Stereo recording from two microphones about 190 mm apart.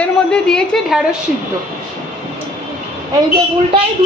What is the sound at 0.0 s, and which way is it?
Speech, 5° left (ahead or behind).